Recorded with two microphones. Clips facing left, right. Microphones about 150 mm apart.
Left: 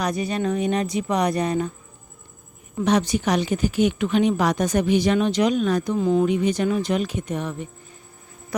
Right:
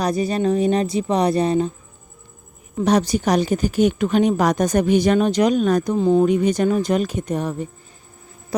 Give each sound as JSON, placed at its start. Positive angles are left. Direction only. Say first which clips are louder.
{"t": 0.0, "sound": "speech", "louder": "right 4 dB", "side_deg": -35}
{"t": 2.8, "sound": "speech", "louder": "right 3 dB", "side_deg": -40}
{"t": 6.0, "sound": "speech", "louder": "right 4 dB", "side_deg": -30}